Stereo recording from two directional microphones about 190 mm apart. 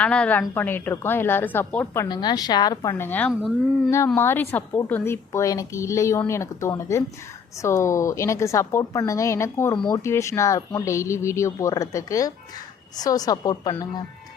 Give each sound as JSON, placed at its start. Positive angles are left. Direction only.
{"t": 0.0, "sound": "a woman's voice", "side_deg": 5}